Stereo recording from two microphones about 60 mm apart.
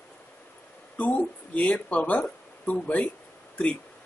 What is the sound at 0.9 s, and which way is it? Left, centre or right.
Speech, left.